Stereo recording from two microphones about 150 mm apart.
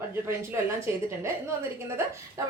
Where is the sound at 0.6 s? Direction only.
15° right (ahead or behind).